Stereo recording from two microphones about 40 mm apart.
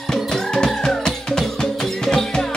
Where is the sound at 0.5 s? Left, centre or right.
Centre.